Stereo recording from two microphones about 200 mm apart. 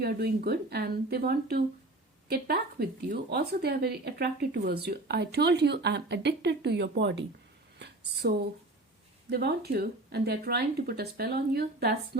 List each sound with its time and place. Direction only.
0.0 s a woman's voice: 50° right (ahead or behind)
7.8 s a sound: 55° right (ahead or behind)
9.3 s speech: 55° right (ahead or behind)